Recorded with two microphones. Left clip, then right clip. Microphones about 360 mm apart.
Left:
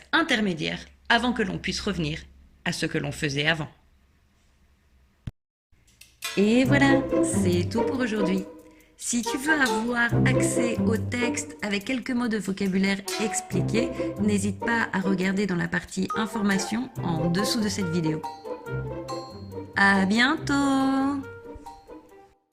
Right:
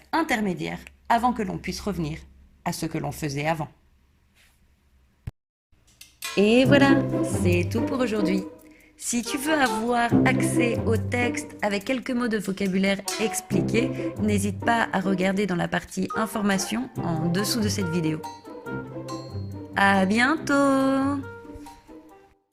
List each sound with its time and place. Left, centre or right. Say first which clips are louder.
0.1 s speech: left 1 dB; centre
6.0 s a sound: even; centre
7.4 s speech: even; centre